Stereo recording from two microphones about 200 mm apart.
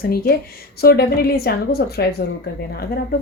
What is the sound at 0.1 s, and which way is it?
A woman's voice, 50° left (ahead or behind).